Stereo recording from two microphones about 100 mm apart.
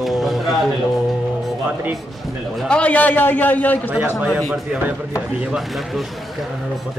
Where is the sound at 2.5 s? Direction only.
5° left (ahead or behind).